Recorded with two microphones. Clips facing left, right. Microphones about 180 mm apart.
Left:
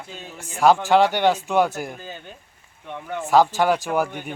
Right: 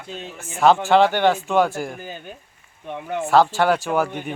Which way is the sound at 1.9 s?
15° right (ahead or behind).